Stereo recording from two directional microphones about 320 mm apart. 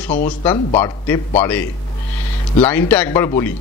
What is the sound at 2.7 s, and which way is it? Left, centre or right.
Speech, centre.